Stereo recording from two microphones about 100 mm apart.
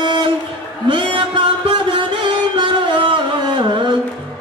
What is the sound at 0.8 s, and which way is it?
Music, 55° right (ahead or behind).